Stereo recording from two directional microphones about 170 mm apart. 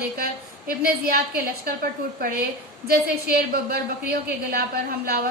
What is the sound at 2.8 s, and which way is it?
A woman's voice, 65° right (ahead or behind).